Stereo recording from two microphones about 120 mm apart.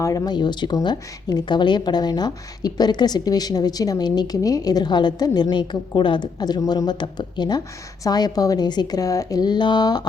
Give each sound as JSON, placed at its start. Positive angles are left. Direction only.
{"t": 0.0, "sound": "speech", "side_deg": 30}